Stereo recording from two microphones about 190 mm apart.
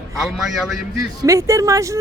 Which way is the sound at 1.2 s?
15° right (ahead or behind).